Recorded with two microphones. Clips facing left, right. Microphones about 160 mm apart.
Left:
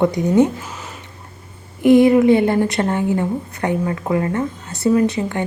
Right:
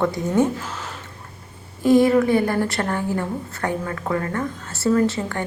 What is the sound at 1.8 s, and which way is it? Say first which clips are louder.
A woman's voice: left 4 dB; 20° left (ahead or behind).